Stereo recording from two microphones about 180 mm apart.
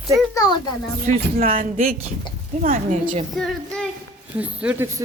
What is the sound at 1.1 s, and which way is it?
Speech, 50° right (ahead or behind).